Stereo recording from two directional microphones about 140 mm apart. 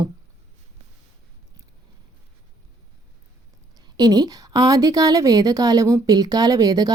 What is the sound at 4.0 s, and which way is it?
A woman's voice, 25° right (ahead or behind).